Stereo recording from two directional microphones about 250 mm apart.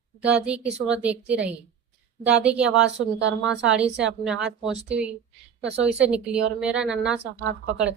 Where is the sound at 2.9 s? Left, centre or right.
Right.